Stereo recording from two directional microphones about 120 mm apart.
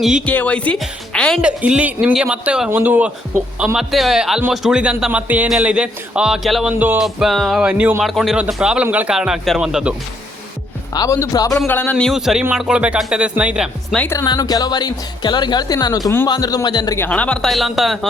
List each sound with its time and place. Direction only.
0.0 s speech: 5° right (ahead or behind)
0.3 s speech: 10° left (ahead or behind)
1.1 s music: 5° left (ahead or behind)
1.4 s speech: 10° right (ahead or behind)
3.8 s speech: centre (ahead or behind)
6.7 s speech: 15° right (ahead or behind)
7.0 s speech: centre (ahead or behind)
8.0 s speech: centre (ahead or behind)
10.9 s speech: 30° left (ahead or behind)
11.7 s speech: 15° left (ahead or behind)
12.0 s speech: 5° right (ahead or behind)
14.3 s a woman's voice: 30° left (ahead or behind)
17.0 s speech: 10° left (ahead or behind)